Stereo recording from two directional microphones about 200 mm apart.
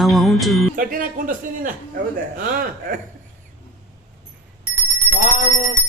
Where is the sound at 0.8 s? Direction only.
45° right (ahead or behind).